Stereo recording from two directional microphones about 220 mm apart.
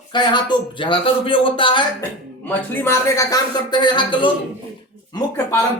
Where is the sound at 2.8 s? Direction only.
15° left (ahead or behind).